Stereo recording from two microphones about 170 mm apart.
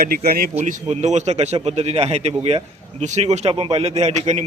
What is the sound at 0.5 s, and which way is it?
A man's voice, 40° right (ahead or behind).